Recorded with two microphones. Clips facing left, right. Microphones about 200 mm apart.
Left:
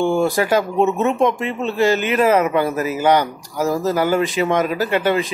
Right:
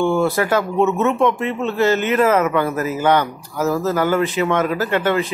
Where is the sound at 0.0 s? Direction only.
15° left (ahead or behind).